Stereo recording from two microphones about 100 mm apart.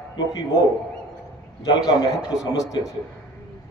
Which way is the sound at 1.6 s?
45° left (ahead or behind).